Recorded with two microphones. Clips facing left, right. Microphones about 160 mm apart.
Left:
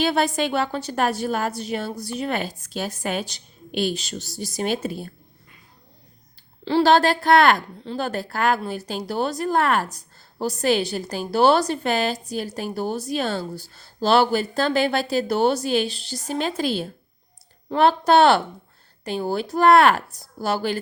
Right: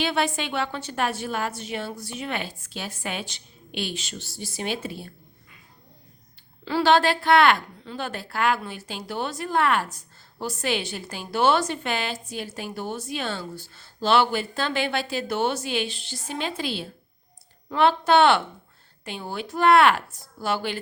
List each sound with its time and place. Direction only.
0.0 s a woman's voice: 40° left (ahead or behind)
6.7 s a woman's voice: 35° left (ahead or behind)